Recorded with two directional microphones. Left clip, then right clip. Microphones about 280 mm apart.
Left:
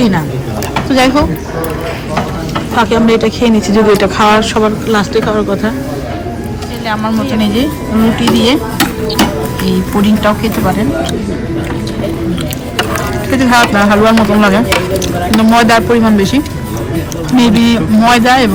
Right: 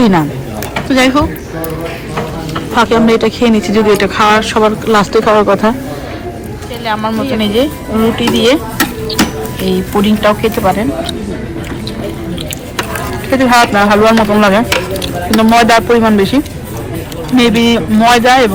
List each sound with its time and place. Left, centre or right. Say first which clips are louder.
0.9 s speech: even; centre
2.7 s speech: right 1 dB; centre
6.8 s speech: right 1 dB; centre
9.6 s speech: right 2 dB; centre
13.3 s speech: right 1 dB; centre